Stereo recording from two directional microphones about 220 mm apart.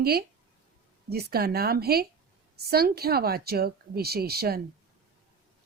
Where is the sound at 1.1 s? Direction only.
45° right (ahead or behind).